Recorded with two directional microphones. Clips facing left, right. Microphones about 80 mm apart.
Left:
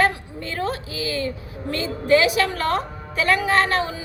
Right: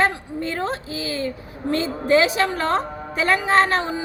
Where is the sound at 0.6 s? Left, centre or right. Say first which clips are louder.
Even; right.